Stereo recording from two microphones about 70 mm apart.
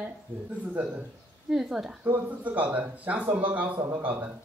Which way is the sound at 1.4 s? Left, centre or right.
Centre.